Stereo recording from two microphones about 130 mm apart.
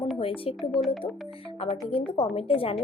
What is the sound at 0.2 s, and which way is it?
Speech, 45° left (ahead or behind).